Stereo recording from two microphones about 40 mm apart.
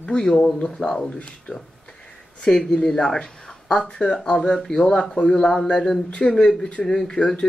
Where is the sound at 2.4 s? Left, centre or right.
Centre.